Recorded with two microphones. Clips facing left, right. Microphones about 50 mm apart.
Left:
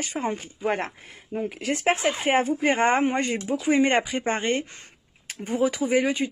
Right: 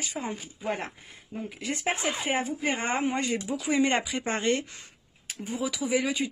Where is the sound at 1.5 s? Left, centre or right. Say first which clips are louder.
Left 6 dB; left.